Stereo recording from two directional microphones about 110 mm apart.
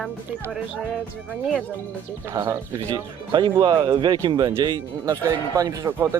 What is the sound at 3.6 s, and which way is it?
Speech, 40° right (ahead or behind).